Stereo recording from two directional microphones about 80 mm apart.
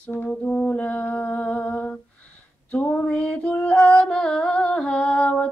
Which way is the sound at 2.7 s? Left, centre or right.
Left.